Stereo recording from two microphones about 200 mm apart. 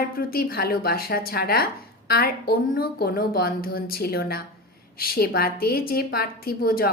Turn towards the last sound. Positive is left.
turn(degrees=45)  # may be behind; listen again after turning